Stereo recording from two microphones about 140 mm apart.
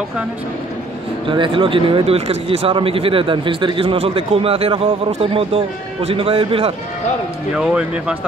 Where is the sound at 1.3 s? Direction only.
35° right (ahead or behind).